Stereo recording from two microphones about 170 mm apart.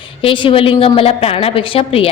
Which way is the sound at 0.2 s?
30° left (ahead or behind).